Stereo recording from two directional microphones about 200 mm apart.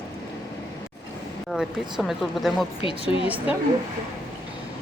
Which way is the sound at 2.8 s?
25° left (ahead or behind).